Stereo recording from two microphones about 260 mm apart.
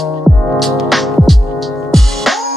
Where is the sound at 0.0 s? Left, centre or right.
Centre.